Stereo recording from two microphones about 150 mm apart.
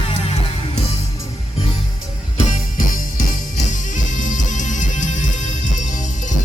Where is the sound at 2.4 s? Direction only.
55° left (ahead or behind).